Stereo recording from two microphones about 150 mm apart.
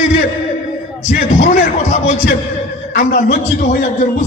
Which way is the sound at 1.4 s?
55° left (ahead or behind).